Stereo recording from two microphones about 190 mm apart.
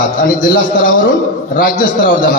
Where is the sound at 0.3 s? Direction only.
50° left (ahead or behind).